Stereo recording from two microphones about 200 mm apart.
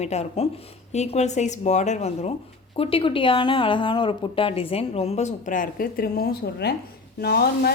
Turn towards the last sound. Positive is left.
turn(degrees=50)  # may be behind; listen again after turning